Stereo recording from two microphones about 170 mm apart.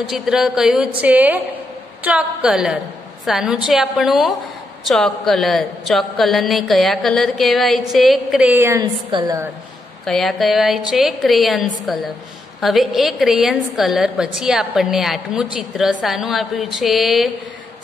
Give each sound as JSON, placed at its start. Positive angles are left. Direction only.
{"t": 0.1, "sound": "a woman's voice", "side_deg": -5}
{"t": 10.0, "sound": "speech", "side_deg": 0}